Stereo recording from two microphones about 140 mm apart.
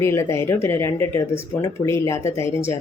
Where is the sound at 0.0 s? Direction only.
20° left (ahead or behind).